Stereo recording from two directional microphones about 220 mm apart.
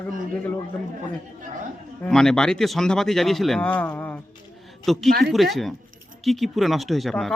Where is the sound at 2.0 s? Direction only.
Centre (ahead or behind).